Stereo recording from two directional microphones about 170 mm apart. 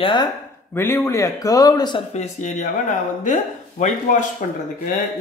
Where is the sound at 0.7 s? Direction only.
15° left (ahead or behind).